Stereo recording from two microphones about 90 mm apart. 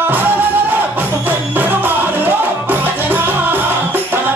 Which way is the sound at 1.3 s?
20° right (ahead or behind).